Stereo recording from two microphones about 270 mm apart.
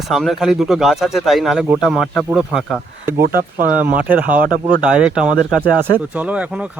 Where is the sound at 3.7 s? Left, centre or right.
Centre.